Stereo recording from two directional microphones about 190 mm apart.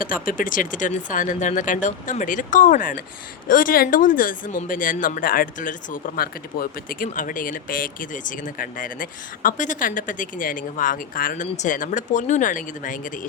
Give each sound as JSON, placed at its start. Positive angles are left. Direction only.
{"t": 0.0, "sound": "speech", "side_deg": 45}